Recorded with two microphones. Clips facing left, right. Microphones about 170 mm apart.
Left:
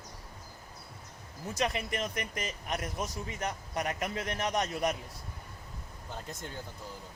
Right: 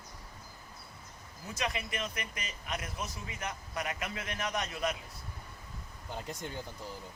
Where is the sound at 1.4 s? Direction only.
45° left (ahead or behind).